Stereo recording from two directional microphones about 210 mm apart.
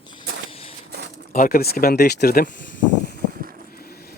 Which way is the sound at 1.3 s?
40° left (ahead or behind).